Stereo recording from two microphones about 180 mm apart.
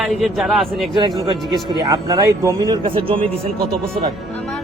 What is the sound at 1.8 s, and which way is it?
Speech, 20° right (ahead or behind).